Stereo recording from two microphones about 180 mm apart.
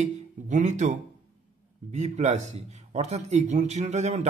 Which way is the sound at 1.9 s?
40° right (ahead or behind).